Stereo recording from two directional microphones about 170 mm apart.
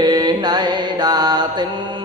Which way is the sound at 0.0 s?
25° right (ahead or behind).